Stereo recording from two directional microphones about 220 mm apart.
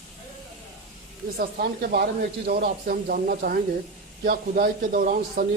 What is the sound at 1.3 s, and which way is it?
A man's voice, 45° right (ahead or behind).